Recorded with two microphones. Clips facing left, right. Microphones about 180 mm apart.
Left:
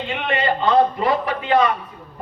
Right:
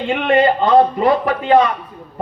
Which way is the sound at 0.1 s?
45° right (ahead or behind).